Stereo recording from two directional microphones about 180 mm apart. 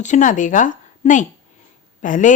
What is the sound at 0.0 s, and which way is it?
A woman's voice, 45° left (ahead or behind).